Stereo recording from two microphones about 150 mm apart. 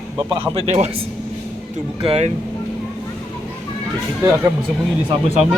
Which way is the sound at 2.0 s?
40° right (ahead or behind).